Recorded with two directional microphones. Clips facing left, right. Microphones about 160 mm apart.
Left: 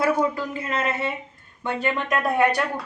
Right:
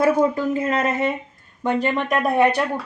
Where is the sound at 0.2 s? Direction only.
45° right (ahead or behind).